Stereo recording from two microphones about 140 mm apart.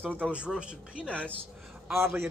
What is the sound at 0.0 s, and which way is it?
Speech, 10° right (ahead or behind).